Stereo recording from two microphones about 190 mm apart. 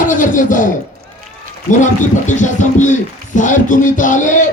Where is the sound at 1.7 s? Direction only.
40° left (ahead or behind).